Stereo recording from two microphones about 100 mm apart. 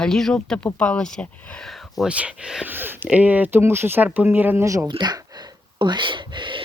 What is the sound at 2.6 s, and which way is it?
Speech, 20° right (ahead or behind).